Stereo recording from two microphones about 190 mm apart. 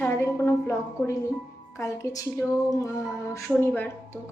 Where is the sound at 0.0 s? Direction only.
15° left (ahead or behind).